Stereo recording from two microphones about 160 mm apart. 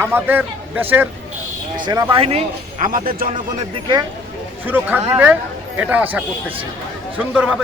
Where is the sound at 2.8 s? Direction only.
60° right (ahead or behind).